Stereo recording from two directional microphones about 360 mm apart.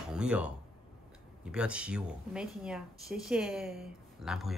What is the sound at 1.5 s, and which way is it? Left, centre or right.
A woman's voice, centre.